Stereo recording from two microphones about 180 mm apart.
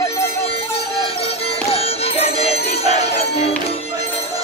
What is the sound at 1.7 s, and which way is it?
Music, 35° left (ahead or behind).